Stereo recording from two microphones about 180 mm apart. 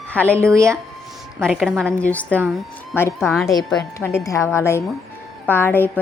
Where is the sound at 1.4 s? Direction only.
Centre (ahead or behind).